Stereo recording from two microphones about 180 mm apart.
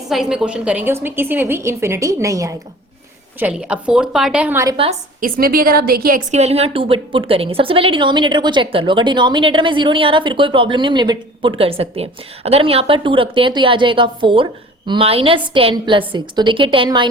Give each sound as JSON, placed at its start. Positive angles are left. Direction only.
{"t": 0.1, "sound": "a woman's voice", "side_deg": -5}
{"t": 3.4, "sound": "a woman's voice", "side_deg": -5}
{"t": 5.2, "sound": "a woman's voice", "side_deg": -55}
{"t": 6.3, "sound": "a woman's voice", "side_deg": -35}